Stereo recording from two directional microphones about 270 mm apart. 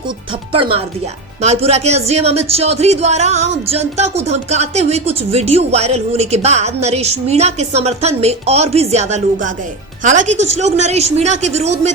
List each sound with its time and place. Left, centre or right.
0.5 s speech: centre